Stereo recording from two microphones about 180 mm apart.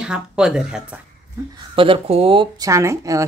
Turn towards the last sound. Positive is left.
turn(degrees=-15)  # may be behind; listen again after turning